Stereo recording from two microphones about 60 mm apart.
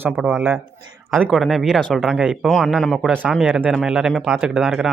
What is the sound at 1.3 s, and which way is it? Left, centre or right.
Speech, centre.